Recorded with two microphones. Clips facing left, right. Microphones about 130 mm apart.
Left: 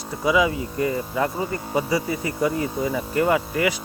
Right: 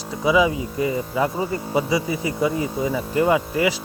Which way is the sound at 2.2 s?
15° right (ahead or behind).